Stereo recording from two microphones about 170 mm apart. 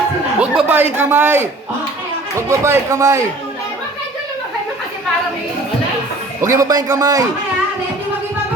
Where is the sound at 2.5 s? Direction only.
15° right (ahead or behind).